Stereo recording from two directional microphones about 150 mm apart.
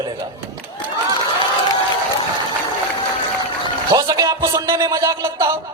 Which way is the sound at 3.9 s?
25° right (ahead or behind).